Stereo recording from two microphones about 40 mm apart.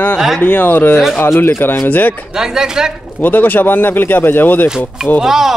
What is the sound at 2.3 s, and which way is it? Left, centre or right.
Speech, centre.